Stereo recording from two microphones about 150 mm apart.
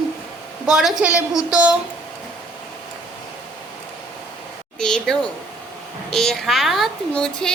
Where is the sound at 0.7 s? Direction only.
Centre (ahead or behind).